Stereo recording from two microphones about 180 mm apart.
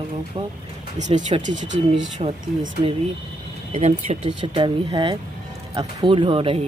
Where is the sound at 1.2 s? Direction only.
40° right (ahead or behind).